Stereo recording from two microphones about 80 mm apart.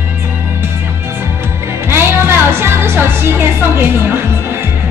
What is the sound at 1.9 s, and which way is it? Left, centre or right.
Music, right.